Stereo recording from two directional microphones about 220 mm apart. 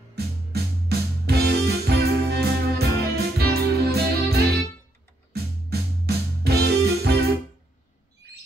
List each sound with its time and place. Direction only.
0.1 s music: 45° right (ahead or behind)